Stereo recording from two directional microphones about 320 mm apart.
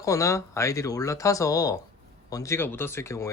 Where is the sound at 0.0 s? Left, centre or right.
Centre.